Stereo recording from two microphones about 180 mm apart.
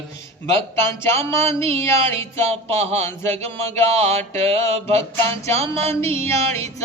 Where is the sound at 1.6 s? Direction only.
35° right (ahead or behind).